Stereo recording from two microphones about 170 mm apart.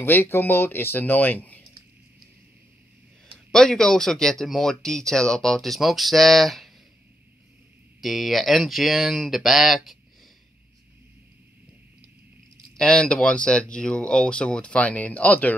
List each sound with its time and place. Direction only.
0.0 s speech: 15° left (ahead or behind)
3.5 s speech: 5° left (ahead or behind)
8.0 s speech: centre (ahead or behind)
12.7 s speech: 5° left (ahead or behind)